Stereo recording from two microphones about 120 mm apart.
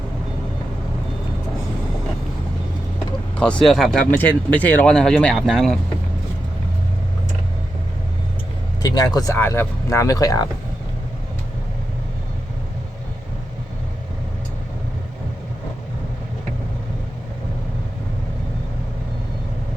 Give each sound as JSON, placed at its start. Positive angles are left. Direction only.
{"t": 3.3, "sound": "speech", "side_deg": 10}
{"t": 4.2, "sound": "speech", "side_deg": 15}
{"t": 8.8, "sound": "speech", "side_deg": 30}